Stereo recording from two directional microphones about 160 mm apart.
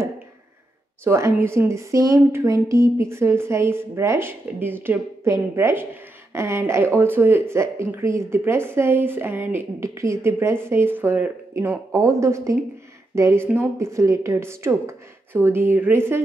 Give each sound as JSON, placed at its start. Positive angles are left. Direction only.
{"t": 1.0, "sound": "a woman's voice", "side_deg": -15}